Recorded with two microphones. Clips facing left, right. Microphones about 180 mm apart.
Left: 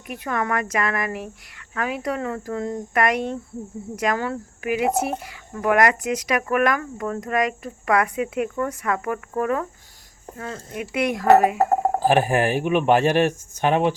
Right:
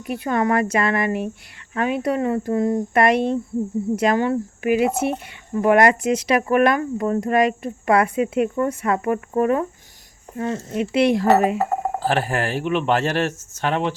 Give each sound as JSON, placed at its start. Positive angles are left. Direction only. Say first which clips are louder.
{"t": 0.1, "sound": "speech", "louder": "right 5 dB", "side_deg": -30}
{"t": 11.5, "sound": "a sound", "louder": "left 3 dB", "side_deg": 45}
{"t": 11.9, "sound": "speech", "louder": "left 3 dB", "side_deg": 15}